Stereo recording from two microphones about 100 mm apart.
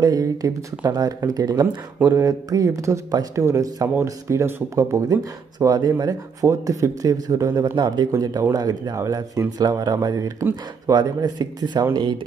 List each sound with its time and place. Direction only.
0.0 s speech: 35° right (ahead or behind)
4.7 s speech: 35° right (ahead or behind)